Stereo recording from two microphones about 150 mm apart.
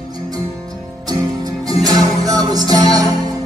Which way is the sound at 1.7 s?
25° right (ahead or behind).